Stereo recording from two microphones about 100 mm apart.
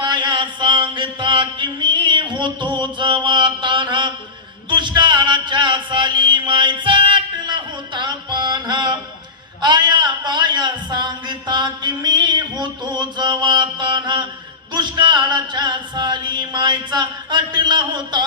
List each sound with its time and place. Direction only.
0.0 s mantra: 50° right (ahead or behind)
4.7 s music: 50° right (ahead or behind)
9.6 s a sound: 45° right (ahead or behind)